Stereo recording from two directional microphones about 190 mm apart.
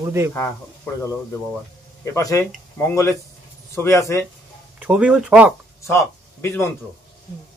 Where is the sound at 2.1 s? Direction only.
15° left (ahead or behind).